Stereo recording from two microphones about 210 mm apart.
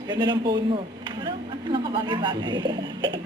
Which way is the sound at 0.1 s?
20° right (ahead or behind).